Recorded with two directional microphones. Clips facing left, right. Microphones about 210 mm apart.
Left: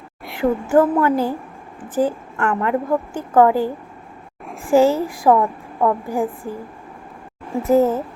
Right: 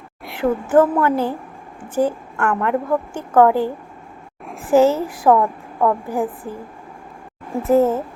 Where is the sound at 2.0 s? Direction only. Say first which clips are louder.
Even; 5° left (ahead or behind).